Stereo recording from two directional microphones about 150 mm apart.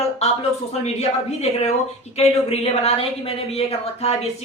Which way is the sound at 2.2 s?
40° left (ahead or behind).